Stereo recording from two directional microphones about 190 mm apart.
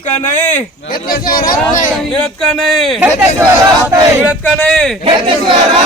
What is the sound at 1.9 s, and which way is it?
A man's voice, 5° left (ahead or behind).